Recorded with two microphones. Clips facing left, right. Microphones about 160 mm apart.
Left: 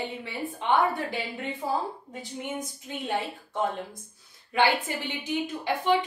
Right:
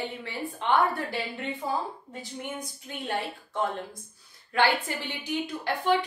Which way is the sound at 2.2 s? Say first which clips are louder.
Left 2 dB; 20° left (ahead or behind).